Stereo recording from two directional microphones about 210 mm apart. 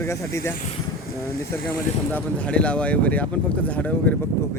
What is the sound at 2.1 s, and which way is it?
Speech, 5° left (ahead or behind).